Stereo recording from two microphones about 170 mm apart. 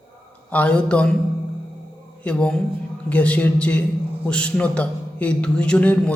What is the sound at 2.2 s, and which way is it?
A man's voice, 5° left (ahead or behind).